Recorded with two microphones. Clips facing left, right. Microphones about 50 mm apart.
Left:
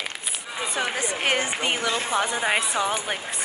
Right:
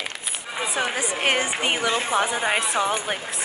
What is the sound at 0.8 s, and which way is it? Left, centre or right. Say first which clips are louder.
A woman's voice: right 1 dB; centre.